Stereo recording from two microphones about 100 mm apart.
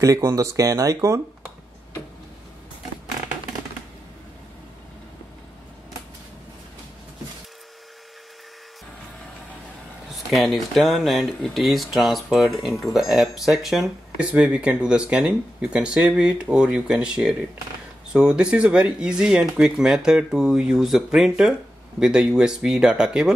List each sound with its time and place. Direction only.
0.0 s speech: 30° right (ahead or behind)
10.3 s speech: centre (ahead or behind)